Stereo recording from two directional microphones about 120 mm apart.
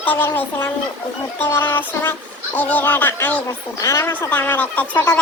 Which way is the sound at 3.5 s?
30° left (ahead or behind).